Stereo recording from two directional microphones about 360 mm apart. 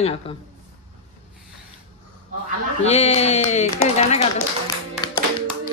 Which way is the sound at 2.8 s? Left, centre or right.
Centre.